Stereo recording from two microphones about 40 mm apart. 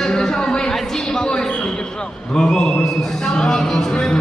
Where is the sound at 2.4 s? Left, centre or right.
Centre.